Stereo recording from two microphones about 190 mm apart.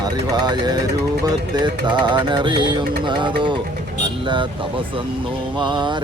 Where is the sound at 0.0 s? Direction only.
20° right (ahead or behind).